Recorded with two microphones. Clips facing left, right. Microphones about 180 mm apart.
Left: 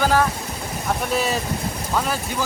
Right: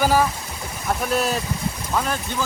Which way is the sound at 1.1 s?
Centre (ahead or behind).